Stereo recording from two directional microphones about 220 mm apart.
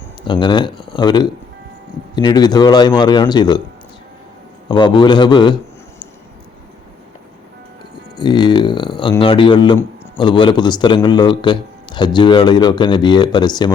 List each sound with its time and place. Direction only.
0.3 s a man's voice: 20° left (ahead or behind)
4.7 s a man's voice: 20° left (ahead or behind)
8.1 s a man's voice: 20° left (ahead or behind)